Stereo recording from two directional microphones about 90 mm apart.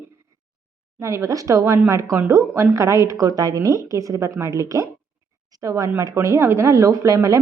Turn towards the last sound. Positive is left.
turn(degrees=-40)  # may be behind; listen again after turning